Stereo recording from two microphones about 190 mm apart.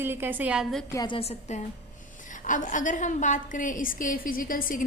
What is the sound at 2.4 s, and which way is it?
A woman's voice, 40° left (ahead or behind).